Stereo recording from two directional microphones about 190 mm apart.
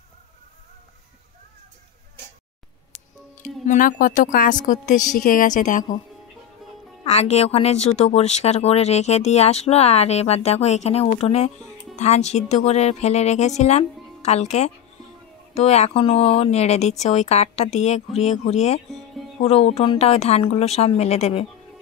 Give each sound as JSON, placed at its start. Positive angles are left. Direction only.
{"t": 3.6, "sound": "a woman's voice", "side_deg": 45}
{"t": 7.1, "sound": "speech", "side_deg": 35}
{"t": 18.9, "sound": "music", "side_deg": 0}
{"t": 19.4, "sound": "speech", "side_deg": 30}